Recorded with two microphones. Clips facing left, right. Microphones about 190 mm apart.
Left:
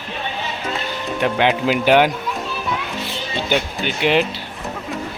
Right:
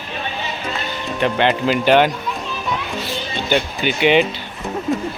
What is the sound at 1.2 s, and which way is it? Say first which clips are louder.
Speech: right 1 dB; 5° left (ahead or behind).